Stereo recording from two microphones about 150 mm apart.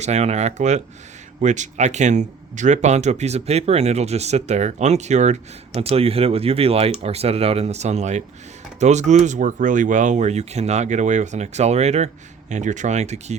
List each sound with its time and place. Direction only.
0.0 s speech: 45° right (ahead or behind)